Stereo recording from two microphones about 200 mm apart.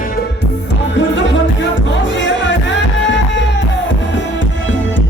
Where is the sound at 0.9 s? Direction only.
65° left (ahead or behind).